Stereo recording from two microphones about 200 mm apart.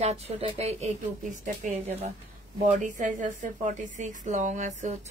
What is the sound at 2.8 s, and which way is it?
A woman's voice, 40° right (ahead or behind).